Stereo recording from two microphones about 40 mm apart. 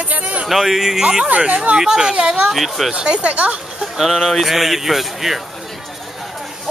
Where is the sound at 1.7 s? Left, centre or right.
Centre.